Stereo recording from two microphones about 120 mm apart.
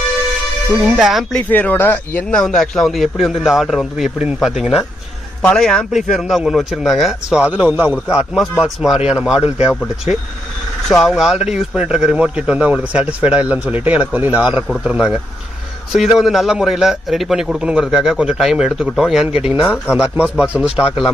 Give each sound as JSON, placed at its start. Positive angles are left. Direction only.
{"t": 0.8, "sound": "a man's voice", "side_deg": 0}
{"t": 1.5, "sound": "speech", "side_deg": 15}
{"t": 2.4, "sound": "a man's voice", "side_deg": 5}
{"t": 5.4, "sound": "a man's voice", "side_deg": 10}
{"t": 10.9, "sound": "a man's voice", "side_deg": 0}